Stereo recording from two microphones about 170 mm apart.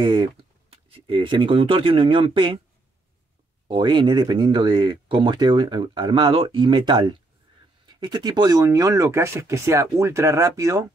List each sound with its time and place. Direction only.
0.0 s speech: 25° right (ahead or behind)
3.6 s speech: 30° right (ahead or behind)